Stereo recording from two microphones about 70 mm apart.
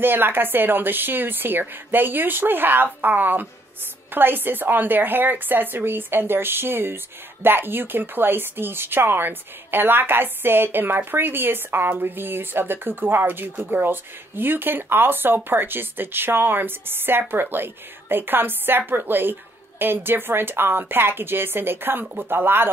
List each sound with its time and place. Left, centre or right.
0.0 s a woman's voice: right